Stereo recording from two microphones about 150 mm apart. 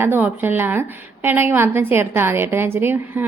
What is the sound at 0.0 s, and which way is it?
A woman's voice, 15° right (ahead or behind).